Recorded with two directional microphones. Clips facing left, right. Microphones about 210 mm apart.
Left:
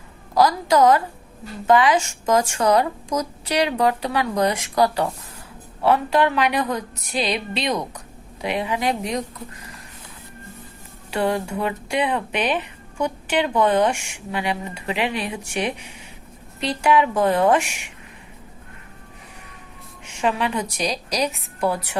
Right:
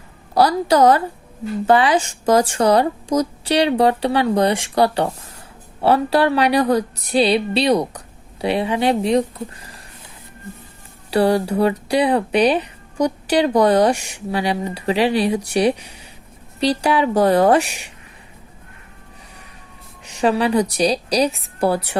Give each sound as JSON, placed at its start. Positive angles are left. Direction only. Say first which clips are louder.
{"t": 0.3, "sound": "speech", "louder": "right 2 dB", "side_deg": -35}
{"t": 11.1, "sound": "speech", "louder": "right 6 dB", "side_deg": -35}
{"t": 20.1, "sound": "speech", "louder": "right 6 dB", "side_deg": -35}